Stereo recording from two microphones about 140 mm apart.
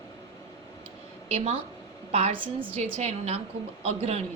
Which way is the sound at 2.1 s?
45° right (ahead or behind).